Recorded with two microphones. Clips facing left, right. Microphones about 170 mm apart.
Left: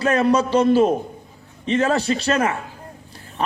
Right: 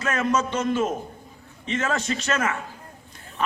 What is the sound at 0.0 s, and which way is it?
A man's voice, 35° left (ahead or behind).